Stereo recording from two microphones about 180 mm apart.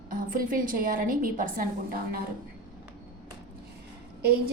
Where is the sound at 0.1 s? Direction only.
50° right (ahead or behind).